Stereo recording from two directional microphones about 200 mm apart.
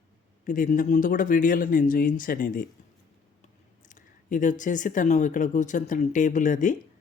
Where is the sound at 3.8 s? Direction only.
40° left (ahead or behind).